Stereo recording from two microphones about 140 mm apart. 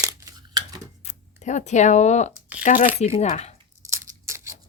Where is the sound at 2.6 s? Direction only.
75° left (ahead or behind).